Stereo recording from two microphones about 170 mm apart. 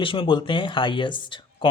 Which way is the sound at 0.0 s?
30° left (ahead or behind).